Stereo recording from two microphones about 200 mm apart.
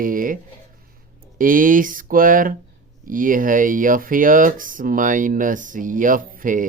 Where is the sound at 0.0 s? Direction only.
45° right (ahead or behind).